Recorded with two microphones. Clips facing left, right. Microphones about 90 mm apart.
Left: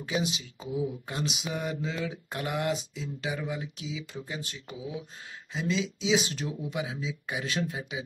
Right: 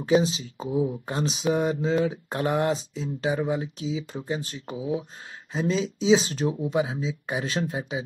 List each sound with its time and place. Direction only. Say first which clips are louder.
0.0 s speech: right 9 dB; 35° right (ahead or behind)